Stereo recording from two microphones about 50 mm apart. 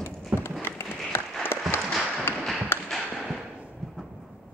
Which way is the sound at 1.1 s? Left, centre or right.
Left.